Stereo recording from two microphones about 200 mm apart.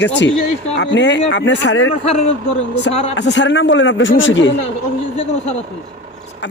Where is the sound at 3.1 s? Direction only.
65° left (ahead or behind).